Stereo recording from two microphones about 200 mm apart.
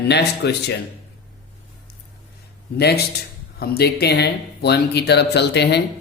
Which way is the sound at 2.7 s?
55° left (ahead or behind).